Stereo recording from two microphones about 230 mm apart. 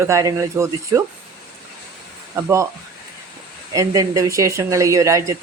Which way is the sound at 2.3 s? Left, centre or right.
Centre.